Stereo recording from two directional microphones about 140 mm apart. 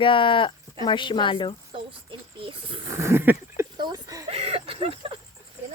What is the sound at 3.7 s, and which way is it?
Chicken, 30° right (ahead or behind).